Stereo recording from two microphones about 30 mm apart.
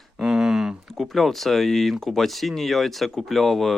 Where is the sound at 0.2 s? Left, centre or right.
Right.